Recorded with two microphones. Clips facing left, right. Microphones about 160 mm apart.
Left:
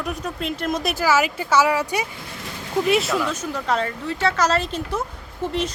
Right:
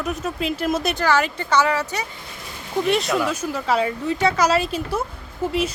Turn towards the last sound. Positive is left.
turn(degrees=-10)  # may be behind; listen again after turning